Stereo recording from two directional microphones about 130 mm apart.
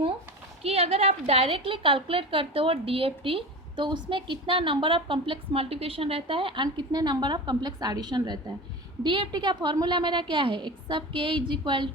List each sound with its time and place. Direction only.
0.6 s a woman's voice: 50° right (ahead or behind)